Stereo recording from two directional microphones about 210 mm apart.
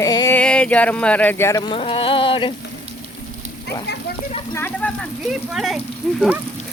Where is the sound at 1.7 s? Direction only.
25° left (ahead or behind).